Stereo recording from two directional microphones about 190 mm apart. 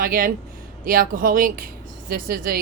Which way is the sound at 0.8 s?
45° right (ahead or behind).